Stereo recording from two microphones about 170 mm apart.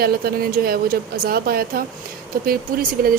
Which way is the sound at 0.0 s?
65° right (ahead or behind).